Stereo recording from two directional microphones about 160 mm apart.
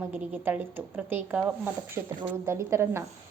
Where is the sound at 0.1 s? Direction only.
10° right (ahead or behind).